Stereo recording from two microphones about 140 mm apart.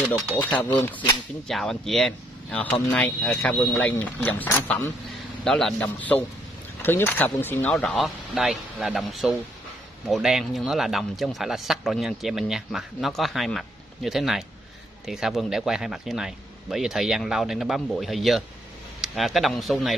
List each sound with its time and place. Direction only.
0.4 s speech: 10° left (ahead or behind)
1.5 s speech: centre (ahead or behind)
5.4 s speech: 5° left (ahead or behind)
8.0 s speech: centre (ahead or behind)